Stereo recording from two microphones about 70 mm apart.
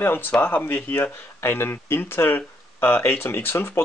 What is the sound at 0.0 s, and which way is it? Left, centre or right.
Speech, left.